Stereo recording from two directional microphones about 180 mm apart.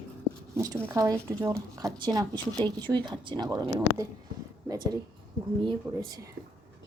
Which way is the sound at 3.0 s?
25° right (ahead or behind).